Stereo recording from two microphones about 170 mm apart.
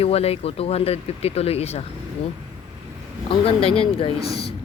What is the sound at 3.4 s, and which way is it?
Speech, 35° left (ahead or behind).